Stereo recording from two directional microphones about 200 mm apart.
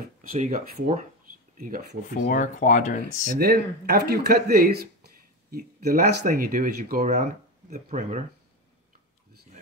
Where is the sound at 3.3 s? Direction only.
50° right (ahead or behind).